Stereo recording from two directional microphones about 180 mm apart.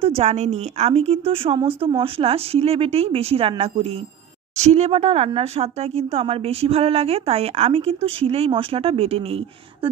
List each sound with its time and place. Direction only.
0.0 s speech: 35° right (ahead or behind)